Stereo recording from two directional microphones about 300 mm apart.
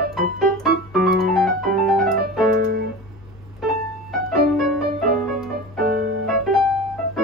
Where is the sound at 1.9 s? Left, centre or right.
Centre.